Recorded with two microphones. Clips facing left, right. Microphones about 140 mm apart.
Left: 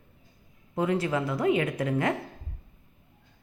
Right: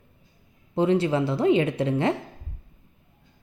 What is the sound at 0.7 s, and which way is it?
A woman's voice, 25° right (ahead or behind).